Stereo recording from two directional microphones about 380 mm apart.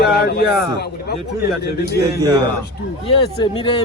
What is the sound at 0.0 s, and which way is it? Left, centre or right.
A man's voice, left.